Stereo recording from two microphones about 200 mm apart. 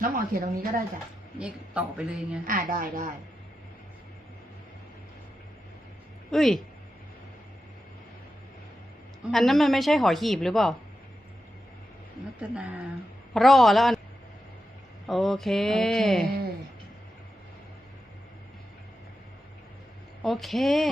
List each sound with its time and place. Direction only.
0.0 s speech: 45° right (ahead or behind)
1.4 s speech: 5° right (ahead or behind)
2.5 s speech: 45° right (ahead or behind)
6.3 s speech: centre (ahead or behind)
9.2 s speech: centre (ahead or behind)
12.4 s a woman's voice: 5° right (ahead or behind)
15.0 s speech: centre (ahead or behind)
20.2 s speech: centre (ahead or behind)